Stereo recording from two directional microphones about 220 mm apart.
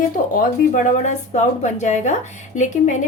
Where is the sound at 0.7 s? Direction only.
30° left (ahead or behind).